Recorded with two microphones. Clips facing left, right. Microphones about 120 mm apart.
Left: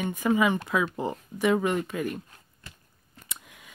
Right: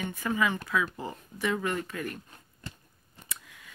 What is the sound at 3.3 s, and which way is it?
Scissors, 20° left (ahead or behind).